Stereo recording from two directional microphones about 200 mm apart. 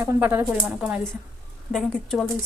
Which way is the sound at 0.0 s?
10° right (ahead or behind).